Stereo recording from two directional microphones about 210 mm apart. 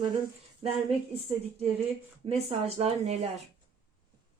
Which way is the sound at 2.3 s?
30° right (ahead or behind).